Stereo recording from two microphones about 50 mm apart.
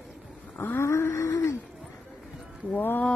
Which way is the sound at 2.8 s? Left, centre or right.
Left.